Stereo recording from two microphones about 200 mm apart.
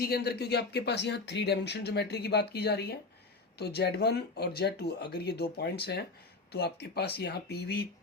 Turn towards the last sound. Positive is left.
turn(degrees=55)  # may be behind; listen again after turning